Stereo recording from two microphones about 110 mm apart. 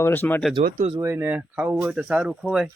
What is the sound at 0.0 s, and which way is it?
Speech, 20° left (ahead or behind).